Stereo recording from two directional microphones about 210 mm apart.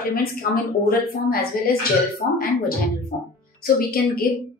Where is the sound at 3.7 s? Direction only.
45° left (ahead or behind).